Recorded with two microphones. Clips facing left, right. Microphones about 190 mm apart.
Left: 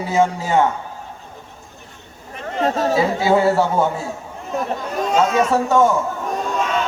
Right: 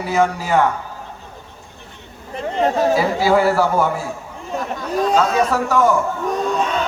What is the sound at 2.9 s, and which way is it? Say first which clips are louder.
A man's voice: right 1 dB; 25° left (ahead or behind).